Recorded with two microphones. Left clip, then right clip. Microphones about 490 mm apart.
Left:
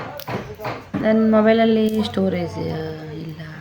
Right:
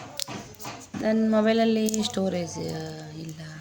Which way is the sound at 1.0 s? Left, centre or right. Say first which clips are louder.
Left 7 dB; right.